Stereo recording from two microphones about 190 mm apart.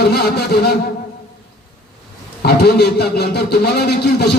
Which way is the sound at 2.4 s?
60° left (ahead or behind).